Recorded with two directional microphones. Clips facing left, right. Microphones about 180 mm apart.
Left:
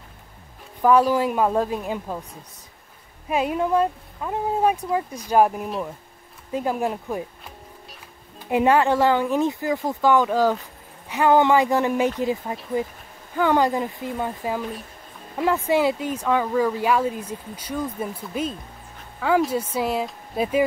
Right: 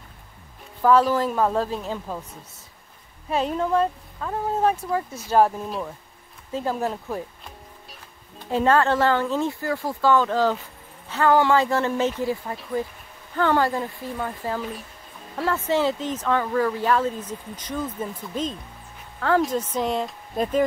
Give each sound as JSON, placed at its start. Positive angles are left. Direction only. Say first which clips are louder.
{"t": 1.0, "sound": "speech", "louder": "left 1 dB", "side_deg": 10}
{"t": 3.3, "sound": "speech", "louder": "left 1 dB", "side_deg": 10}
{"t": 14.6, "sound": "speech", "louder": "left 1 dB", "side_deg": 0}
{"t": 15.3, "sound": "speech", "louder": "left 3 dB", "side_deg": 15}